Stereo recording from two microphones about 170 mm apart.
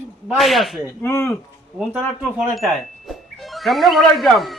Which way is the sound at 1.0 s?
15° left (ahead or behind).